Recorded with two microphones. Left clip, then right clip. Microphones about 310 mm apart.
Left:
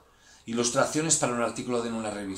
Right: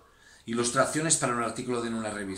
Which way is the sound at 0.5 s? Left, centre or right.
Centre.